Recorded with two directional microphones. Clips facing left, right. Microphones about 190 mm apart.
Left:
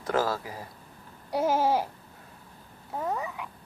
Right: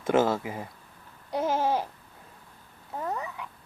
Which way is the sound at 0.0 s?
25° right (ahead or behind).